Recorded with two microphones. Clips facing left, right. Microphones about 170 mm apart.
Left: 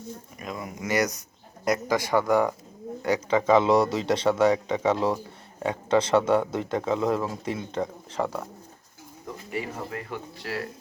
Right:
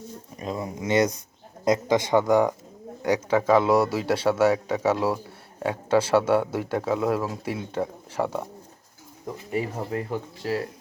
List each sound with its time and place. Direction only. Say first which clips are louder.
0.3 s a man's voice: right 6 dB; 30° right (ahead or behind); by 8.4 s 15° right (ahead or behind)
9.5 s speech: right 5 dB; 30° right (ahead or behind)